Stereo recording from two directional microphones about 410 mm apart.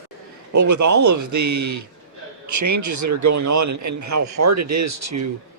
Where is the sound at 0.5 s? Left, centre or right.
Right.